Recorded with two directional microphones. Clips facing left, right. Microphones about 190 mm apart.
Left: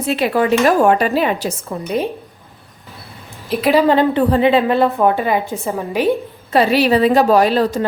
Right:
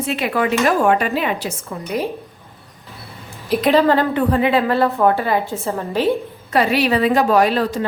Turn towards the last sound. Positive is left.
turn(degrees=35)  # may be behind; listen again after turning